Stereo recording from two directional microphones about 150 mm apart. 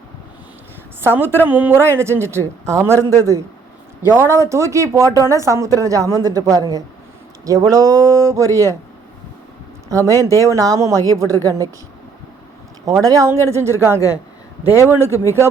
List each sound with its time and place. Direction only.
1.0 s speech: 15° right (ahead or behind)
9.9 s speech: 20° right (ahead or behind)
12.8 s speech: 20° right (ahead or behind)